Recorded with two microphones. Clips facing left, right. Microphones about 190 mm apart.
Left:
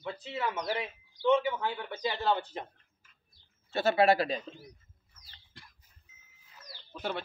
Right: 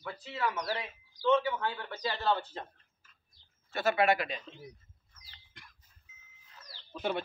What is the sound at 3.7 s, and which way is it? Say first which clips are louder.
Speech: left 3 dB; 30° left (ahead or behind).